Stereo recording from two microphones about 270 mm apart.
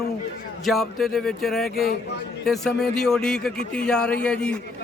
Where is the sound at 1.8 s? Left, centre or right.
Left.